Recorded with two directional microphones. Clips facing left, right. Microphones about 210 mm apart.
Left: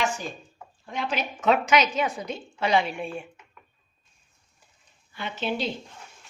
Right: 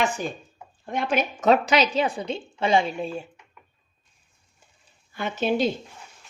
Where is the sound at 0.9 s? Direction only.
50° right (ahead or behind); by 2.8 s 25° right (ahead or behind).